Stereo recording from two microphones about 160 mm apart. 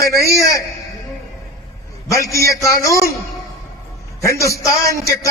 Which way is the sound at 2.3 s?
20° left (ahead or behind).